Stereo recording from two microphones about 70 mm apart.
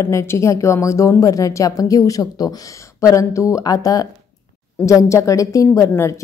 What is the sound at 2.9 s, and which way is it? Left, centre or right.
A woman's voice, left.